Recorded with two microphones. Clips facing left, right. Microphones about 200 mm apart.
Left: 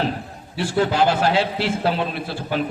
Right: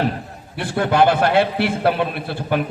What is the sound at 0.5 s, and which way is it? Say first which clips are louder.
A man's voice: right 1 dB; 55° right (ahead or behind).